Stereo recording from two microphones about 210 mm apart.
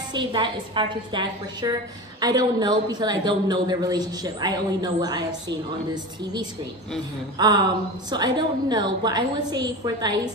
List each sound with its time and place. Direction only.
0.1 s a woman's voice: 25° right (ahead or behind)
7.3 s a woman's voice: 20° right (ahead or behind)